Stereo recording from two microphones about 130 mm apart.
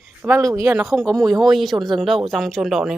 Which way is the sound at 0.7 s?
5° right (ahead or behind).